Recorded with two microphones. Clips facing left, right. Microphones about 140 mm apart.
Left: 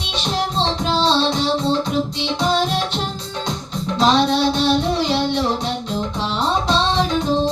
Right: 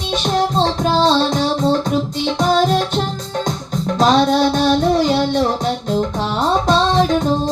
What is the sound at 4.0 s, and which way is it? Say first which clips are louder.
Music: right 3 dB; 45° right (ahead or behind).